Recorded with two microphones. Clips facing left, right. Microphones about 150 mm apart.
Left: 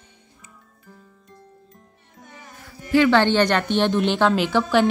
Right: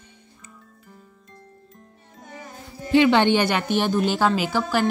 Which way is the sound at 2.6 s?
20° right (ahead or behind).